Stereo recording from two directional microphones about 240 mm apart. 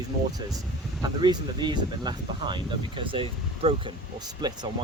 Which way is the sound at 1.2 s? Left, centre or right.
Centre.